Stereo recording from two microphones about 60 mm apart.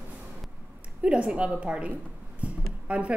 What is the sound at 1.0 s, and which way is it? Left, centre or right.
A woman's voice, centre.